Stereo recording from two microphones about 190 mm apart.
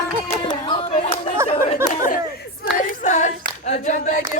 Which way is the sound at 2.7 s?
40° left (ahead or behind).